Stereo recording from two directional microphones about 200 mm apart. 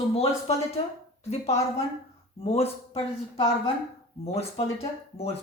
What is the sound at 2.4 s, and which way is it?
Speech, 30° left (ahead or behind).